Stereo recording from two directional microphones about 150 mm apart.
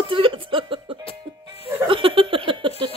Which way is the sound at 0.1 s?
35° right (ahead or behind).